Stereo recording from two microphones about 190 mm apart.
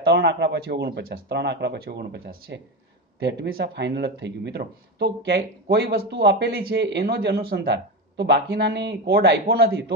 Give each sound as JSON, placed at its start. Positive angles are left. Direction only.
{"t": 0.0, "sound": "speech", "side_deg": -65}